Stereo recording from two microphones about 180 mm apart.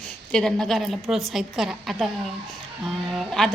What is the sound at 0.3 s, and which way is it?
Speech, 5° left (ahead or behind).